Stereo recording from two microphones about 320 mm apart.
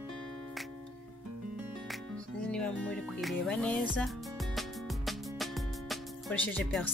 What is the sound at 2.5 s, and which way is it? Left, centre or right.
Music, centre.